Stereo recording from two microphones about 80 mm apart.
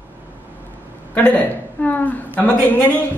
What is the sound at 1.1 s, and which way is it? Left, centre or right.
A woman's voice, centre.